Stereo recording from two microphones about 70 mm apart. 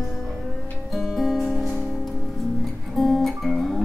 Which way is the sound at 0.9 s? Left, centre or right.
Centre.